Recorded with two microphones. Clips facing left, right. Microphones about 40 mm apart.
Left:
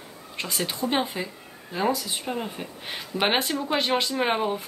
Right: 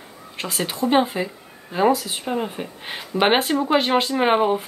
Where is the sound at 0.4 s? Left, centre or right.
Centre.